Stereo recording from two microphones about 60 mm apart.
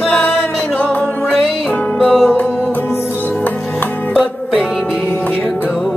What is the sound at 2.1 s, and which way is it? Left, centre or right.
Music, centre.